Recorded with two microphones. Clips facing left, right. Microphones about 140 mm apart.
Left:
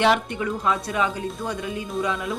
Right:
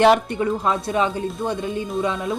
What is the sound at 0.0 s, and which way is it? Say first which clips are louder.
Speech: right 5 dB; 40° right (ahead or behind).